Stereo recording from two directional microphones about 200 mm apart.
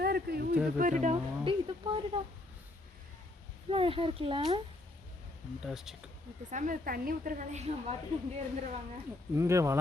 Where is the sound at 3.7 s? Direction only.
25° right (ahead or behind).